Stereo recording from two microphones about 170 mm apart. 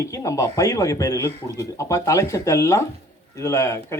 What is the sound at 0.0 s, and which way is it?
A man's voice, 20° left (ahead or behind).